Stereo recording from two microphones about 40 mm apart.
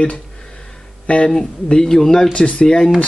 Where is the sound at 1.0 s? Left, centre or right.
Left.